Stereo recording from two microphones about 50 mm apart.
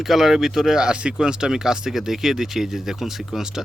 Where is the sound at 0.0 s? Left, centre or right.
Centre.